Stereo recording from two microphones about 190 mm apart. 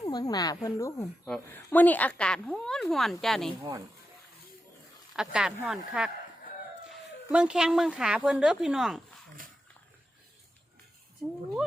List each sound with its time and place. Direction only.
0.0 s a woman's voice: 20° left (ahead or behind); by 3.5 s centre (ahead or behind)
5.1 s a woman's voice: 5° right (ahead or behind)
7.3 s a woman's voice: 5° right (ahead or behind)